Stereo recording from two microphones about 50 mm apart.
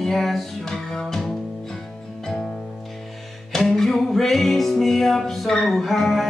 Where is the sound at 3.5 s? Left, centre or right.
Centre.